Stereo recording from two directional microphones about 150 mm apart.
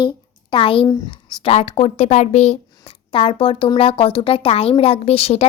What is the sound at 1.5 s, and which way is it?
Speech, 40° left (ahead or behind).